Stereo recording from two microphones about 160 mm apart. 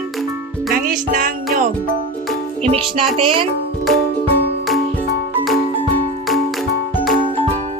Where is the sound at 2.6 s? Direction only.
40° right (ahead or behind).